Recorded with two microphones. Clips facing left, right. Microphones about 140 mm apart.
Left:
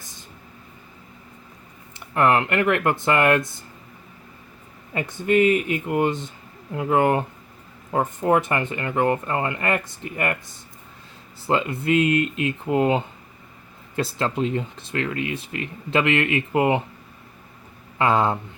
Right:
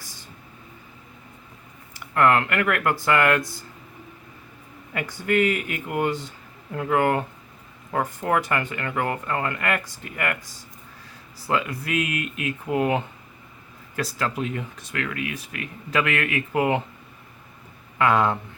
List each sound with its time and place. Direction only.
0.0 s vehicle: 20° left (ahead or behind)
1.9 s speech: 20° left (ahead or behind)
4.9 s speech: 25° left (ahead or behind)
17.9 s speech: 25° left (ahead or behind)